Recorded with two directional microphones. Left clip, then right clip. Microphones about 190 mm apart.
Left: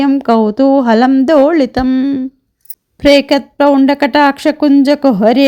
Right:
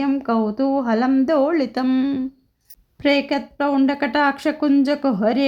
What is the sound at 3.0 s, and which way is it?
A woman's voice, 35° left (ahead or behind).